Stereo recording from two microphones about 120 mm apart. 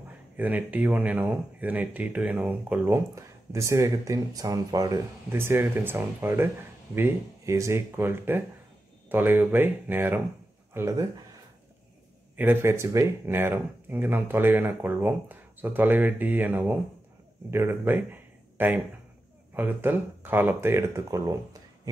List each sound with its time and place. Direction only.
0.4 s speech: 15° right (ahead or behind)
12.4 s speech: 20° right (ahead or behind)